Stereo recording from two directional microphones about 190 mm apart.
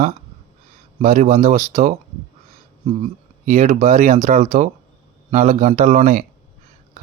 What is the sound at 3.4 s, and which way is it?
Speech, 40° right (ahead or behind).